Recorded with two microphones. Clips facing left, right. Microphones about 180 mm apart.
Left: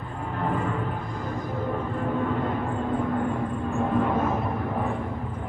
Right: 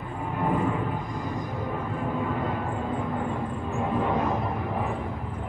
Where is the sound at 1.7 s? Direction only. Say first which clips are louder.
Left 3 dB; 5° right (ahead or behind).